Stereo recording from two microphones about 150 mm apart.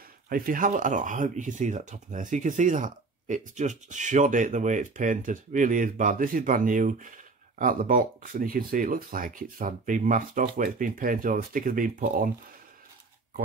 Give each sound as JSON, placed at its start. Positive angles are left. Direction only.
{"t": 0.3, "sound": "speech", "side_deg": -65}